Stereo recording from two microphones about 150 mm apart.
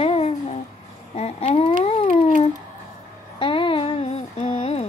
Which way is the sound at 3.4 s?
35° left (ahead or behind).